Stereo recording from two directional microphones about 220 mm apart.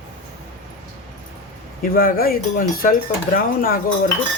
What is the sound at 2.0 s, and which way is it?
A woman's voice, 40° left (ahead or behind).